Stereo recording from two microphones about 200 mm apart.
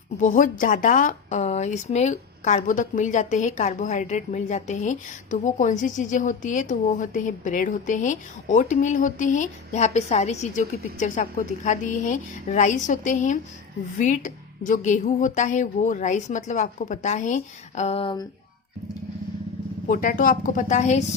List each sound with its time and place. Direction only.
0.2 s a woman's voice: 40° left (ahead or behind)
19.9 s a woman's voice: 40° left (ahead or behind)